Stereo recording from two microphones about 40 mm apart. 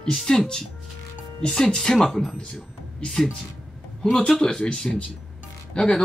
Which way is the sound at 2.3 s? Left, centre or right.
Left.